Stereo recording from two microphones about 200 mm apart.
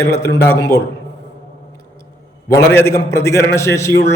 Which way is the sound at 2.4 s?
10° left (ahead or behind).